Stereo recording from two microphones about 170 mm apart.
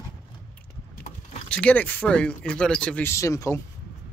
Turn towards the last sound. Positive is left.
turn(degrees=20)  # may be behind; listen again after turning